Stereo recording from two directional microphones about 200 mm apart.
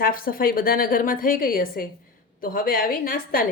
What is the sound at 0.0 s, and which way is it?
Speech, 45° left (ahead or behind).